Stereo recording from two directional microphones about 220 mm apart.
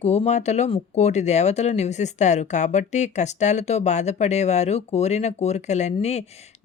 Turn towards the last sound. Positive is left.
turn(degrees=30)  # may be behind; listen again after turning